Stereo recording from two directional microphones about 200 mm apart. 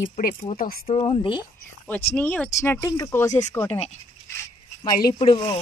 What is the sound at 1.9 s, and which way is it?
Speech, 10° left (ahead or behind).